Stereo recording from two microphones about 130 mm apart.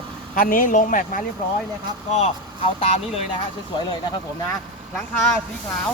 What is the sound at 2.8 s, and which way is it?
Speech, 50° left (ahead or behind).